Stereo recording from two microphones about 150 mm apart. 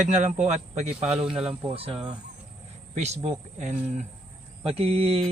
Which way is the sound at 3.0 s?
45° right (ahead or behind).